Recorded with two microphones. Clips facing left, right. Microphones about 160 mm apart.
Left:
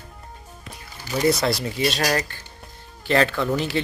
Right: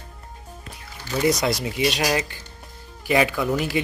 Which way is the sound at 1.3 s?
15° right (ahead or behind).